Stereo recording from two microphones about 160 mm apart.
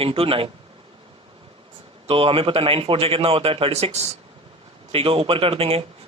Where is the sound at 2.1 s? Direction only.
35° right (ahead or behind).